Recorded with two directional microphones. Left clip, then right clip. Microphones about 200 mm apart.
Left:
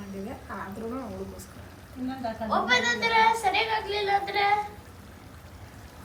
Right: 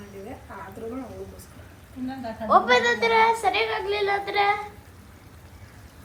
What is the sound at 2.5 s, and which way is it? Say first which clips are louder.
Speech: right 6 dB; 20° right (ahead or behind).